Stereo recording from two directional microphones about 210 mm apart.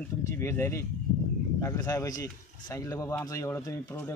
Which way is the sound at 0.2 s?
10° left (ahead or behind).